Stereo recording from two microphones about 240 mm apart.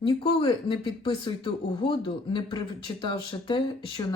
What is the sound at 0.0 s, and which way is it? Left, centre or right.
Speech, left.